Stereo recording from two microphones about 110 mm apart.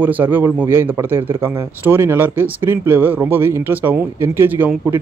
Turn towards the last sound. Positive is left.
turn(degrees=-20)  # may be behind; listen again after turning